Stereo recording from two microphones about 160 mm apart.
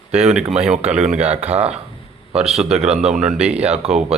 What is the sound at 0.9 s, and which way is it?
Speech, 45° right (ahead or behind).